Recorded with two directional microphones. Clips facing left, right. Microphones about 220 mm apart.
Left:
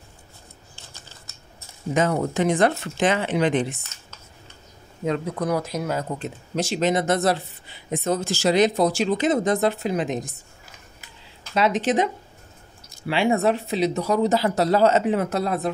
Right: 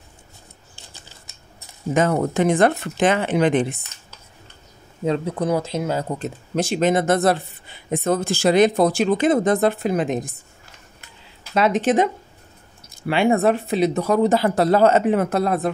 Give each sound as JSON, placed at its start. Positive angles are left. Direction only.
{"t": 2.0, "sound": "speech", "side_deg": -55}
{"t": 5.0, "sound": "speech", "side_deg": -30}
{"t": 6.1, "sound": "speech", "side_deg": -45}
{"t": 11.5, "sound": "speech", "side_deg": -50}
{"t": 13.1, "sound": "speech", "side_deg": -55}